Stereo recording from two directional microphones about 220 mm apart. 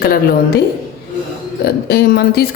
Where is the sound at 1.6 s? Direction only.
45° left (ahead or behind).